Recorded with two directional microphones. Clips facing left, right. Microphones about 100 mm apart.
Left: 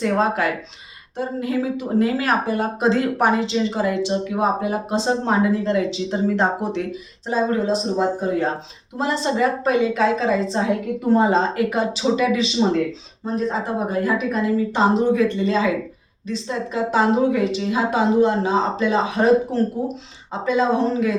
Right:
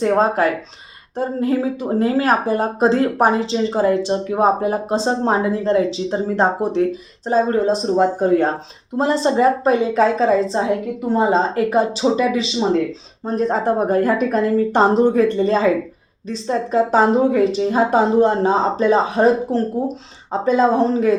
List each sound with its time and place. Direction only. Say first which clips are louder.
0.0 s a woman's voice: right 4 dB; 35° right (ahead or behind); by 8.4 s 50° right (ahead or behind)
9.0 s speech: right 4 dB; 35° right (ahead or behind)
13.2 s a woman's voice: right 5 dB; 50° right (ahead or behind)